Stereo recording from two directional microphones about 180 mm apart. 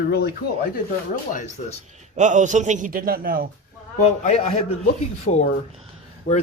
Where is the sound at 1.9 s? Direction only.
40° right (ahead or behind).